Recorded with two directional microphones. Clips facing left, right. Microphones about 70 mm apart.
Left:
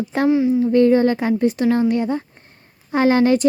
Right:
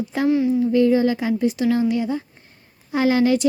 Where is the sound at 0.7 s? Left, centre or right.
Left.